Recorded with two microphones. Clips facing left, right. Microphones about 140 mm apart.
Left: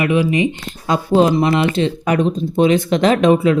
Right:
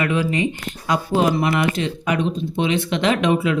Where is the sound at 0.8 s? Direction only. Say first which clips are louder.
Left 5 dB; 30° left (ahead or behind).